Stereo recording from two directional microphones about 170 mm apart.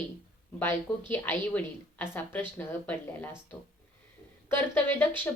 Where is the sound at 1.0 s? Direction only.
10° left (ahead or behind).